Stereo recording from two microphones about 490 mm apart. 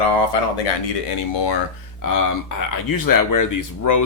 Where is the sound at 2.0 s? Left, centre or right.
Left.